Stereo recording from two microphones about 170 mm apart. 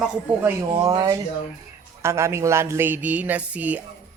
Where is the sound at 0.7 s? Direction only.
20° right (ahead or behind).